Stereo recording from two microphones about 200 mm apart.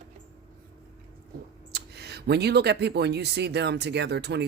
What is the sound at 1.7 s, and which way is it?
Speech, 55° right (ahead or behind).